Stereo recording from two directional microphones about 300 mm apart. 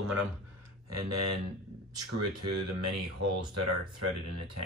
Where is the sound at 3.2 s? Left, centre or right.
Right.